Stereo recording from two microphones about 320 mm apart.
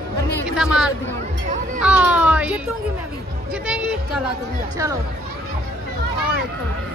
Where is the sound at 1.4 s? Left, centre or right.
Right.